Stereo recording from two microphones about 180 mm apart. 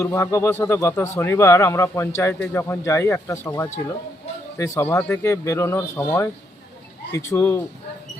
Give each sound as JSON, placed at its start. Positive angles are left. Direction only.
{"t": 0.0, "sound": "speech", "side_deg": 15}